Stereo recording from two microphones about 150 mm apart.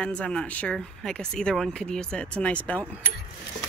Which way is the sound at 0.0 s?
5° left (ahead or behind).